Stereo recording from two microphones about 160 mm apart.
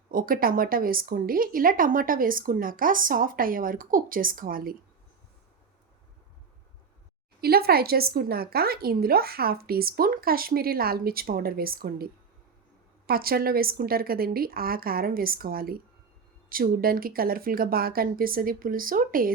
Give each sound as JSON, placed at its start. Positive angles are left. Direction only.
{"t": 0.1, "sound": "speech", "side_deg": -60}
{"t": 7.4, "sound": "a woman's voice", "side_deg": -75}